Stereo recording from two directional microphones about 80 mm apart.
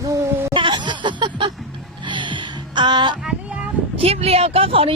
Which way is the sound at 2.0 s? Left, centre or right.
Right.